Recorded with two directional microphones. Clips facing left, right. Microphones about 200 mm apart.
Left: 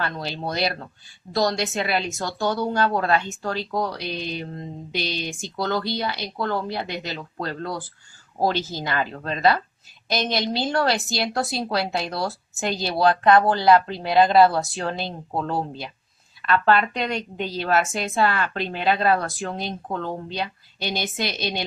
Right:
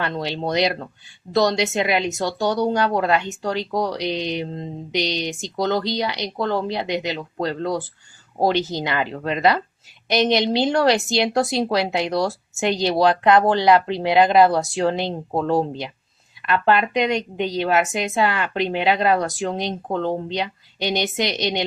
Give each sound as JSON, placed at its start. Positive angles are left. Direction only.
{"t": 0.0, "sound": "a woman's voice", "side_deg": -25}